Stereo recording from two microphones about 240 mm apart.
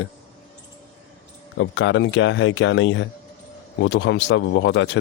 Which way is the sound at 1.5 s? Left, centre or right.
Left.